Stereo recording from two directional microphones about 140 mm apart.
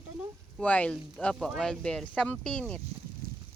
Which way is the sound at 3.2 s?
90° right.